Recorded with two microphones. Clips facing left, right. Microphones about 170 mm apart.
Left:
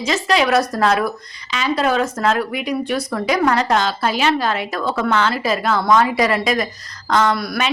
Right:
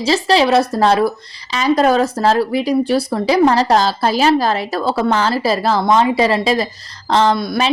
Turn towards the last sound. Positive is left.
turn(degrees=-25)  # may be behind; listen again after turning